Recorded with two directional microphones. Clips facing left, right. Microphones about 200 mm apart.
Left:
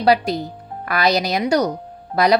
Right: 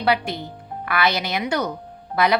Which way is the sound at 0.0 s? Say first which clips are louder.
Left 5 dB; 40° left (ahead or behind).